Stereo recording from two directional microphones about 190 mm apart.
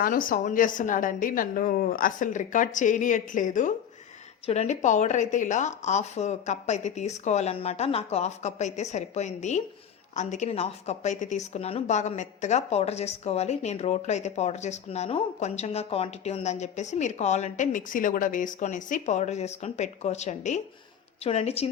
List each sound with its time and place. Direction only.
0.0 s a woman's voice: 45° left (ahead or behind)